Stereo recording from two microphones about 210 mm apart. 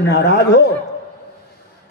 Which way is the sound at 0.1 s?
50° left (ahead or behind).